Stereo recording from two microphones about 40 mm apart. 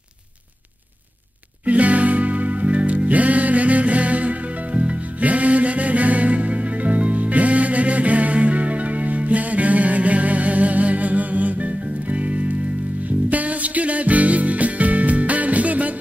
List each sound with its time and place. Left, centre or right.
1.7 s music: right